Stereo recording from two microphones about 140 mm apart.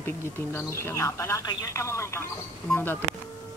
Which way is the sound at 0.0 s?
15° left (ahead or behind).